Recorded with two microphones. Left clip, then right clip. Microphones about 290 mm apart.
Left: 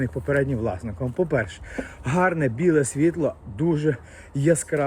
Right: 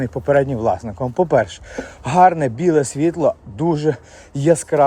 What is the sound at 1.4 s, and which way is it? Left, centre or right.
Speech, right.